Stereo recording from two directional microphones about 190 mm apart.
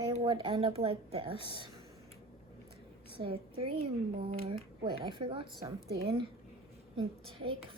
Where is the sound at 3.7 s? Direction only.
30° right (ahead or behind).